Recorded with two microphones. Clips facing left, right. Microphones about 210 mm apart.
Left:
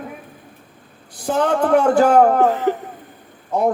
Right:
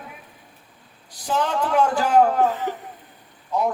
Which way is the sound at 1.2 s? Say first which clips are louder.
Left 6 dB; 50° left (ahead or behind).